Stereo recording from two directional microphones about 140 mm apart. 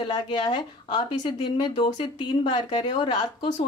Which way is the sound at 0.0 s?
35° left (ahead or behind).